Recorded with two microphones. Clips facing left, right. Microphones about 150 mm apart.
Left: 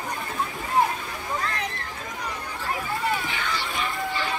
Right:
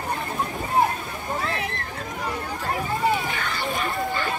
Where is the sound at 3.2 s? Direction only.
45° right (ahead or behind).